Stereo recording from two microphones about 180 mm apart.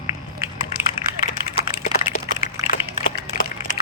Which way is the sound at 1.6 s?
40° left (ahead or behind).